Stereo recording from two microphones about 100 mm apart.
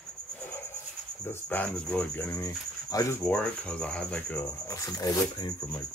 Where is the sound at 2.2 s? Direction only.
25° left (ahead or behind).